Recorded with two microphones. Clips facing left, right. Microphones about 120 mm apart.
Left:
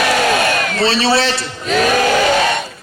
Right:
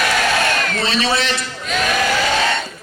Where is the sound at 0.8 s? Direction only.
30° left (ahead or behind).